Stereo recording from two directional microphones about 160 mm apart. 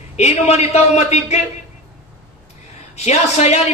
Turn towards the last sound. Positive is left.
turn(degrees=45)  # may be behind; listen again after turning